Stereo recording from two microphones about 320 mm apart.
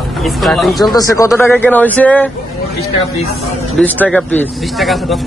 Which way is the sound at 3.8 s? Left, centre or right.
Centre.